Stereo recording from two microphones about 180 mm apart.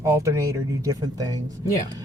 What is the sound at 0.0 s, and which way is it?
Speech, 15° right (ahead or behind).